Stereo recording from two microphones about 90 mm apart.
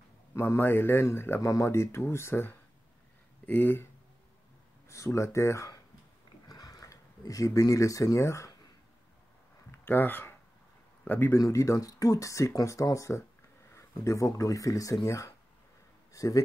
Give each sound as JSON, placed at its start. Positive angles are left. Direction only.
{"t": 0.3, "sound": "speech", "side_deg": 30}
{"t": 4.8, "sound": "speech", "side_deg": 35}
{"t": 6.4, "sound": "a sound", "side_deg": 45}
{"t": 9.7, "sound": "a sound", "side_deg": 20}
{"t": 11.1, "sound": "speech", "side_deg": 20}
{"t": 11.3, "sound": "speech", "side_deg": 35}